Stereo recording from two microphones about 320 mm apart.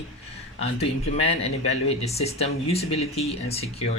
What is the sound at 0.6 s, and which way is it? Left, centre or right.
Speech, centre.